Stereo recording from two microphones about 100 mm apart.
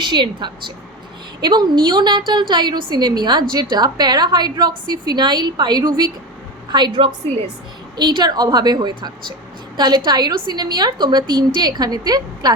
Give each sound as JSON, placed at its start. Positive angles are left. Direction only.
{"t": 0.0, "sound": "a woman's voice", "side_deg": -50}